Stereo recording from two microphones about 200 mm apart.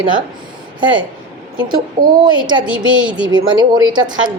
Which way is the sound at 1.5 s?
20° right (ahead or behind).